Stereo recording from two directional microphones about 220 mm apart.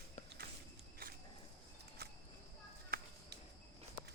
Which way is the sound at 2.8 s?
45° right (ahead or behind).